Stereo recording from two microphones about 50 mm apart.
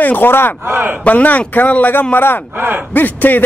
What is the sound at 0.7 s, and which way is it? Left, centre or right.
Speech, right.